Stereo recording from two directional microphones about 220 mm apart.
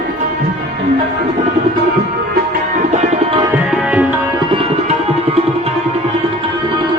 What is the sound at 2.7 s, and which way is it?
Music, 30° right (ahead or behind).